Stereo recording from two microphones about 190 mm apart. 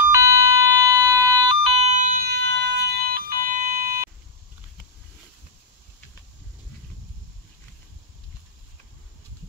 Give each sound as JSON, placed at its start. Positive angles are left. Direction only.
{"t": 0.1, "sound": "emergency vehicle", "side_deg": -15}
{"t": 1.6, "sound": "siren", "side_deg": -30}